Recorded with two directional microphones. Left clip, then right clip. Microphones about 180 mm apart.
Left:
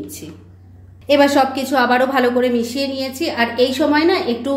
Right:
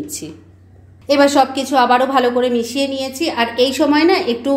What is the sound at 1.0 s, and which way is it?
A woman's voice, 15° right (ahead or behind).